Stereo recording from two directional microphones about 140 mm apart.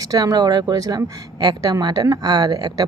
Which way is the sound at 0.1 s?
25° right (ahead or behind).